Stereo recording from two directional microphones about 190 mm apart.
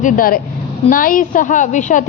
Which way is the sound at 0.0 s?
45° left (ahead or behind).